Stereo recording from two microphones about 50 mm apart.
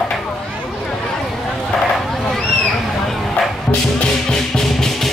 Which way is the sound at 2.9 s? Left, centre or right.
Centre.